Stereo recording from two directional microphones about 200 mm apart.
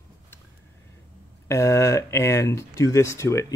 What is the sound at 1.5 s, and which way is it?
Speech, 15° left (ahead or behind).